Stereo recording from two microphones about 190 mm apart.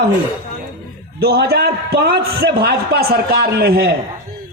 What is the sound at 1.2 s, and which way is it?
A man's voice, 55° right (ahead or behind).